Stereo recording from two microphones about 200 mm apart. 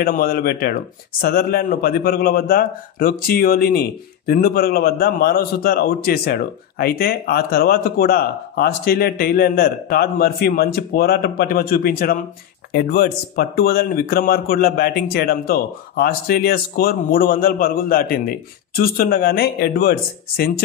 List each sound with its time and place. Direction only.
0.0 s speech: 50° left (ahead or behind)